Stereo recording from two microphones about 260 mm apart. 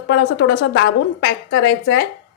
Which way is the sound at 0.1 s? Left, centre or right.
Left.